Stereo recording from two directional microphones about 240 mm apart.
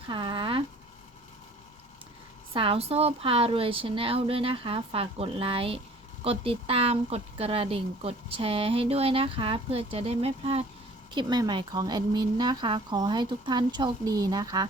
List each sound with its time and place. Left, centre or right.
0.1 s speech: centre
2.5 s speech: right